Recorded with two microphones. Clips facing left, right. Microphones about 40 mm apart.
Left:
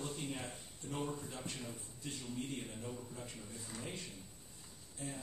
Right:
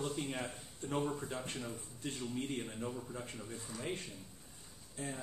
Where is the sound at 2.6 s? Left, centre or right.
Right.